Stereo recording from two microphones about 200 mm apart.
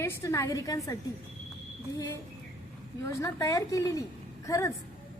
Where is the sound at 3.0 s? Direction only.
15° left (ahead or behind).